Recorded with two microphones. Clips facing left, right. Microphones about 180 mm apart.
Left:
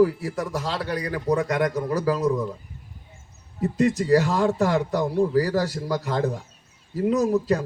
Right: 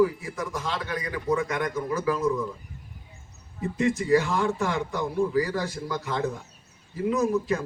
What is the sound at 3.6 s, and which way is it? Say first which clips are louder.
A man's voice: left 4 dB; 40° left (ahead or behind).